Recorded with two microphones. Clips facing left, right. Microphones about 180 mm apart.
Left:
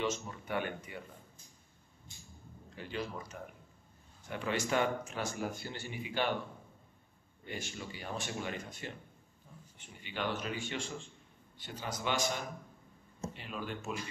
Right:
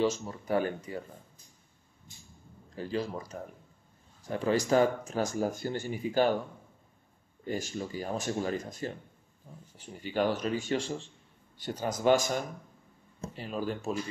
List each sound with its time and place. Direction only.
0.0 s speech: 35° right (ahead or behind)
2.7 s speech: 35° right (ahead or behind)
7.4 s speech: 40° right (ahead or behind)